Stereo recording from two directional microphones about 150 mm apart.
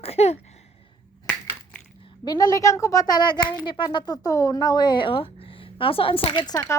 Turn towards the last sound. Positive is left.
turn(degrees=35)  # may be behind; listen again after turning